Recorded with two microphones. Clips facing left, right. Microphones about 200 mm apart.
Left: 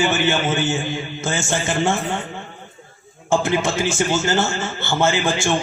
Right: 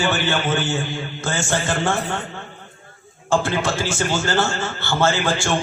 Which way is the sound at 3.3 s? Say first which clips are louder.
Left 1 dB; 20° left (ahead or behind).